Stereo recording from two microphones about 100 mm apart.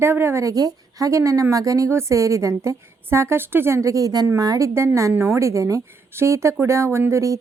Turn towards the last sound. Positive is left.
turn(degrees=-30)  # may be behind; listen again after turning